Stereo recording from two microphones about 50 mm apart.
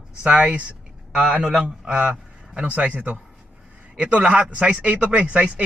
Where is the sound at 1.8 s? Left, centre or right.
Right.